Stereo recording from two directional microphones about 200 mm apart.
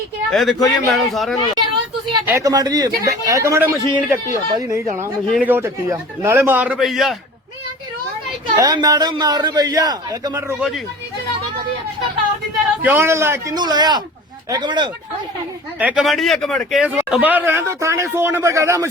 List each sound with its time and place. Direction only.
0.3 s a man's voice: centre (ahead or behind)
2.2 s speech: 15° right (ahead or behind)
8.5 s a man's voice: 20° right (ahead or behind)
12.8 s a man's voice: 10° right (ahead or behind)
15.8 s speech: 5° right (ahead or behind)